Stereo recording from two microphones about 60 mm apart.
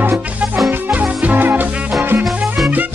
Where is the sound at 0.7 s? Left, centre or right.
Right.